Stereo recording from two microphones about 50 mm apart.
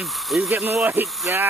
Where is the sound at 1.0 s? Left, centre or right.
Right.